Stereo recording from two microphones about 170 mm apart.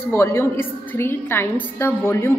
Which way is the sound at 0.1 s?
15° left (ahead or behind).